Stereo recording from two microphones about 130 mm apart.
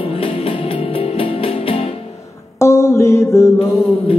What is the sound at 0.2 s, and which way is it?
Music, 45° left (ahead or behind).